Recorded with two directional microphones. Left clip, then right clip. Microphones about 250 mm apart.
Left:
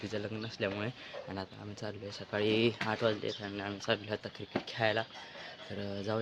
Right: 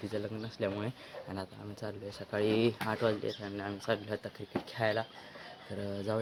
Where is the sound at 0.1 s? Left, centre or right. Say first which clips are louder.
Even; centre.